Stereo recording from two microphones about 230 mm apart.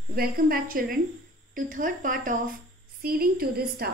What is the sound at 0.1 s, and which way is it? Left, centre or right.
A woman's voice, right.